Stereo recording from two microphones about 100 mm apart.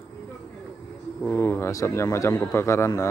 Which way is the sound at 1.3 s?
25° left (ahead or behind).